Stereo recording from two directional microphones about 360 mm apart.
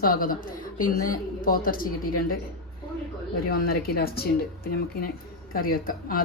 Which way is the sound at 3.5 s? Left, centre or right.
Left.